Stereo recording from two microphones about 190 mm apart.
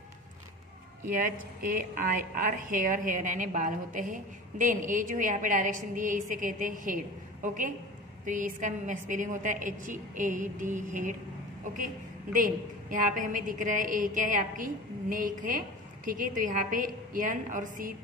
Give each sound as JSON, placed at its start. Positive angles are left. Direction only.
{"t": 1.0, "sound": "a woman's voice", "side_deg": -45}